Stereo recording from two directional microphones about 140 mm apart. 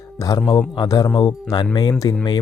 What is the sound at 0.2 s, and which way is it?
Speech, 25° left (ahead or behind).